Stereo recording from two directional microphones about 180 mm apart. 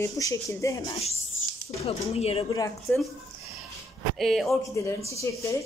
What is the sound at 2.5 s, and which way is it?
Speech, 20° left (ahead or behind).